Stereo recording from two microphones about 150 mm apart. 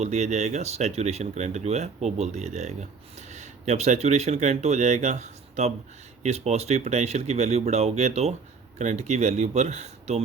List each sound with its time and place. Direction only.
0.0 s speech: 50° right (ahead or behind)